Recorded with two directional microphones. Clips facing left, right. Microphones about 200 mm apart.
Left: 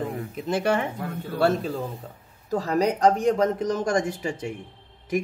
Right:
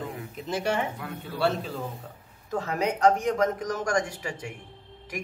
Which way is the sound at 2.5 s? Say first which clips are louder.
Left 5 dB; 35° left (ahead or behind).